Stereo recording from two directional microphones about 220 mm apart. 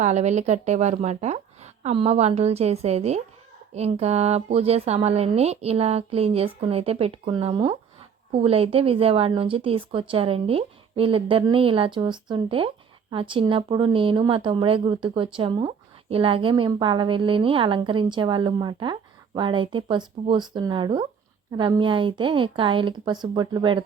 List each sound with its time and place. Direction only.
0.0 s speech: 30° right (ahead or behind)